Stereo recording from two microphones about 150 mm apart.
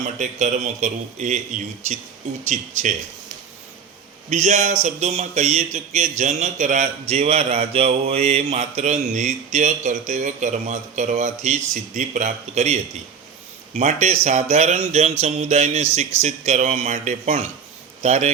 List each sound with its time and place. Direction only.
0.0 s mantra: 50° right (ahead or behind)
2.5 s speech: 55° right (ahead or behind)
4.3 s mantra: 50° right (ahead or behind)
7.0 s mantra: 45° right (ahead or behind)
18.0 s a man's voice: 45° right (ahead or behind)